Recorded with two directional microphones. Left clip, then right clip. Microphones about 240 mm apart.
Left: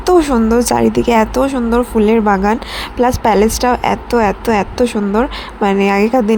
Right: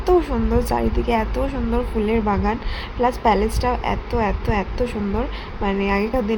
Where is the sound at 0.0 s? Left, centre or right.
Left.